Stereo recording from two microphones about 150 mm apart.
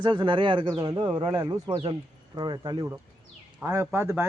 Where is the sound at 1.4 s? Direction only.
25° right (ahead or behind).